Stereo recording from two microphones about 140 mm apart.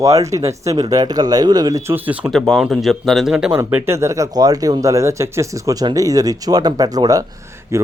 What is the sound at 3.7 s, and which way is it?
Speech, 20° right (ahead or behind).